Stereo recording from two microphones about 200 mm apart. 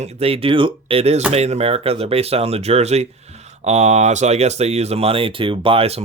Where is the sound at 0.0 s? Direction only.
30° right (ahead or behind).